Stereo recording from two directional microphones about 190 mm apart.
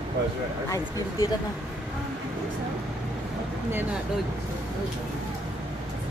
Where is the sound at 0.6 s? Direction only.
20° left (ahead or behind).